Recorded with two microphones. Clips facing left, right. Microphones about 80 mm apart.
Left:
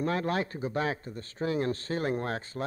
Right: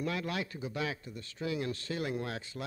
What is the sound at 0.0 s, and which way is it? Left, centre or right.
Speech, left.